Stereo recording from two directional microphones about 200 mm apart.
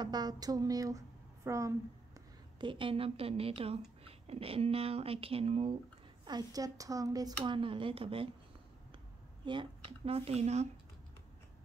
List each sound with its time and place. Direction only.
0.0 s speech: 20° right (ahead or behind)
2.6 s a woman's voice: 25° right (ahead or behind)
6.2 s a woman's voice: 20° right (ahead or behind)
9.4 s a woman's voice: 25° right (ahead or behind)